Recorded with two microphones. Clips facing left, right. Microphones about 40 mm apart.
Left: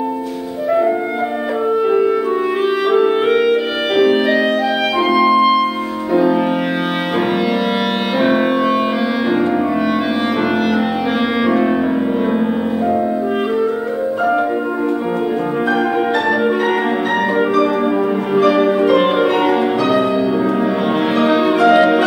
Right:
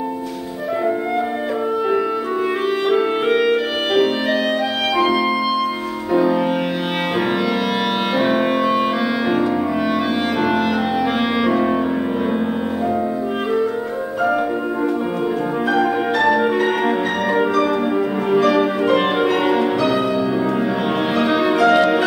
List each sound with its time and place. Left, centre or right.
2.9 s clarinet: centre
5.3 s music: centre
8.2 s music: centre
11.4 s music: centre
18.3 s music: centre
21.2 s music: centre